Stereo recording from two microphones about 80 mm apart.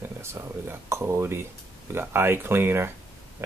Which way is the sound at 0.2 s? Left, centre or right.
Right.